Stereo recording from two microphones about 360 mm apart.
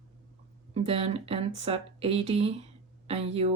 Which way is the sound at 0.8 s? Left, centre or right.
Centre.